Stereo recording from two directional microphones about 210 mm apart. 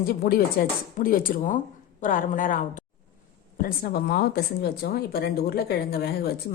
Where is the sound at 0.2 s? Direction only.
45° left (ahead or behind).